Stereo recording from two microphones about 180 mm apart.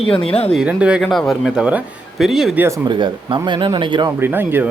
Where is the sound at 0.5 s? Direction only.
5° right (ahead or behind).